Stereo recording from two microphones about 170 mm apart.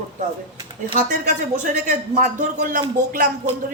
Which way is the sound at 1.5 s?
50° right (ahead or behind).